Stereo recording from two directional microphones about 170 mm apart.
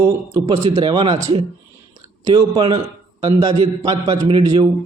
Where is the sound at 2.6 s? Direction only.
35° right (ahead or behind).